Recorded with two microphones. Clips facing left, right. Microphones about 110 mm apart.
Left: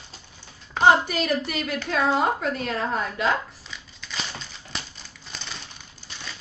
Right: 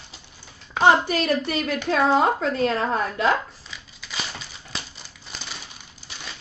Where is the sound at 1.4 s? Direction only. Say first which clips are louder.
Right 4 dB; 35° right (ahead or behind).